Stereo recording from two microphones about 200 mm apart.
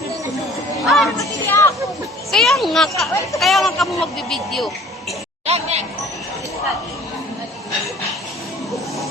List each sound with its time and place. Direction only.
0.9 s speech: centre (ahead or behind)
1.2 s music: 15° left (ahead or behind)
2.3 s speech: centre (ahead or behind)
5.5 s speech: 30° right (ahead or behind)